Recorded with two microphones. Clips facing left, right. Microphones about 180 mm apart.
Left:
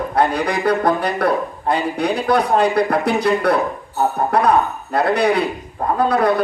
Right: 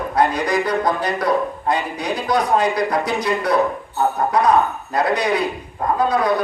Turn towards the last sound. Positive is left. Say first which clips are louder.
# left 2 dB
turn(degrees=60)  # may be behind; listen again after turning